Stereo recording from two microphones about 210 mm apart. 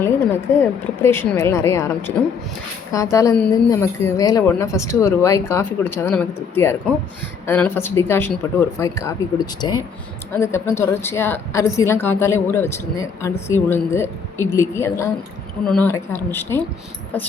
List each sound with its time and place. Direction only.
0.6 s a woman's voice: 10° left (ahead or behind)